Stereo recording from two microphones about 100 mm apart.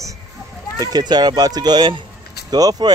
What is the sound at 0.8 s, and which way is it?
Speech, 45° right (ahead or behind).